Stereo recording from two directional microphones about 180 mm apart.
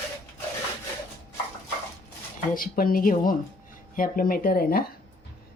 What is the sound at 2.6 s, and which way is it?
Speech, 50° left (ahead or behind).